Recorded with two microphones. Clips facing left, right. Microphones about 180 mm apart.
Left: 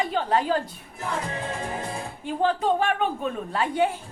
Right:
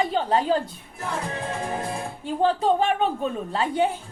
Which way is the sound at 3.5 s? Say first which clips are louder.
Even; 25° right (ahead or behind).